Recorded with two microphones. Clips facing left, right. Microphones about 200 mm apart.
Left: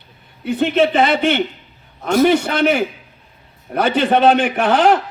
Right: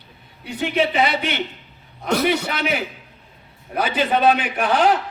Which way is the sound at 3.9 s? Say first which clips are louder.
Left 5 dB; 75° left (ahead or behind).